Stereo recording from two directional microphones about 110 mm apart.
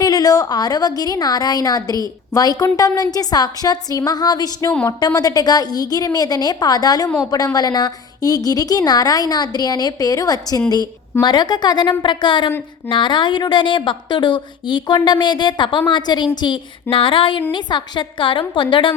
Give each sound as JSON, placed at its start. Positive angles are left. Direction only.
{"t": 0.0, "sound": "a woman's voice", "side_deg": 35}